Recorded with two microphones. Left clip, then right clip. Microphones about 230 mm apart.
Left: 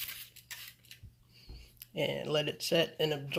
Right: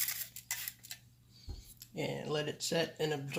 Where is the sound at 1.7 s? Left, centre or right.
Left.